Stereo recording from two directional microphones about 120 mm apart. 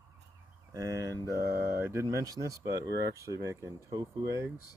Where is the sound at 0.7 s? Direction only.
25° right (ahead or behind).